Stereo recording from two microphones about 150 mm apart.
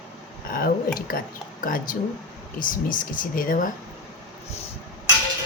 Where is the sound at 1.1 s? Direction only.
75° left (ahead or behind).